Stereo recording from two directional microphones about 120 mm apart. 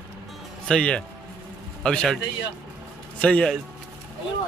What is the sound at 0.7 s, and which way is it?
Speech, 10° left (ahead or behind).